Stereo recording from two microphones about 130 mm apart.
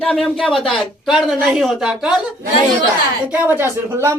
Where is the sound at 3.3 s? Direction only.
15° right (ahead or behind).